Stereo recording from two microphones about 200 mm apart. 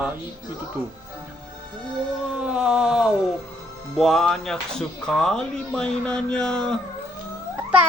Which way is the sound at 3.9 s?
Centre (ahead or behind).